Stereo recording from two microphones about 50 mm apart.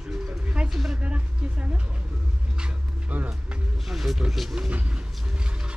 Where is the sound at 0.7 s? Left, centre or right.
Centre.